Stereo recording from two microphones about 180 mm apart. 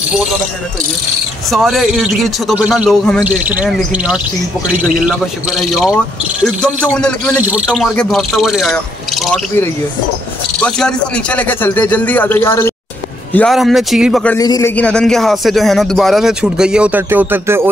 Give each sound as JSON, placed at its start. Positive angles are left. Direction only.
{"t": 1.5, "sound": "speech", "side_deg": 0}
{"t": 3.3, "sound": "bird", "side_deg": -10}
{"t": 5.0, "sound": "speech", "side_deg": 0}
{"t": 7.4, "sound": "speech", "side_deg": -5}
{"t": 10.6, "sound": "speech", "side_deg": 5}
{"t": 14.4, "sound": "speech", "side_deg": 20}
{"t": 14.8, "sound": "speech", "side_deg": 5}